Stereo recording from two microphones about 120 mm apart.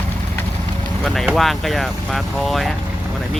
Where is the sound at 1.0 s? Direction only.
5° left (ahead or behind).